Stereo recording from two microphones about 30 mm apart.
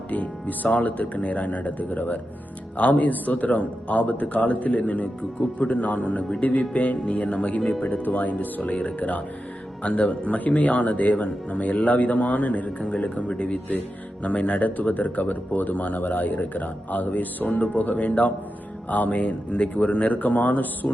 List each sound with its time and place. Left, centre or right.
0.1 s speech: left
2.7 s speech: left
8.0 s speech: left
8.4 s speech: left
8.7 s speech: left
9.8 s speech: left
12.9 s speech: left
14.6 s speech: left
17.5 s speech: left
18.9 s speech: left